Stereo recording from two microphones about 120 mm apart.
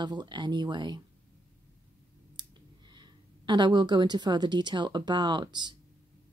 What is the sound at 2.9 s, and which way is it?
A woman's voice, 40° right (ahead or behind).